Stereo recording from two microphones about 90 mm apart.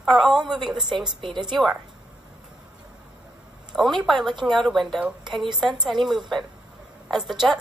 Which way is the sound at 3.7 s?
Centre (ahead or behind).